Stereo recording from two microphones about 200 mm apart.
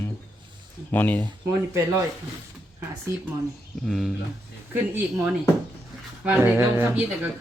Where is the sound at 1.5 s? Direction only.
15° right (ahead or behind).